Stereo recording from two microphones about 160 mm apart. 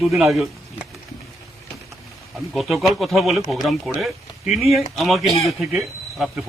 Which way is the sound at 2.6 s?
Centre (ahead or behind).